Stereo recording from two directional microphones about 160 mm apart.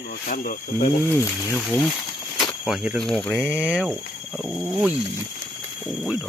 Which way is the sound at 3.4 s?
5° right (ahead or behind).